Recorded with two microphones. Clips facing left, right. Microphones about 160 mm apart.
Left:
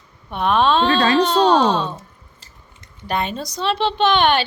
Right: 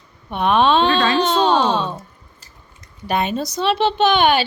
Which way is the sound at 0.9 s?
35° left (ahead or behind).